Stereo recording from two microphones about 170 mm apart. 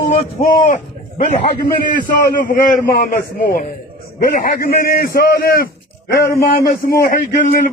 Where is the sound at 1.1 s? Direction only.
30° left (ahead or behind).